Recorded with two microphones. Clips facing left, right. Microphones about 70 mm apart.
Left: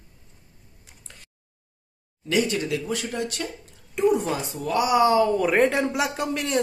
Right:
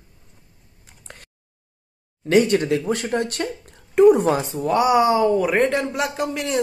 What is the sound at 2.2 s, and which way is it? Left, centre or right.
Speech, right.